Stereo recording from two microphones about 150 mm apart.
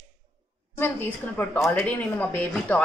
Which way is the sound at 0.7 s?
15° left (ahead or behind).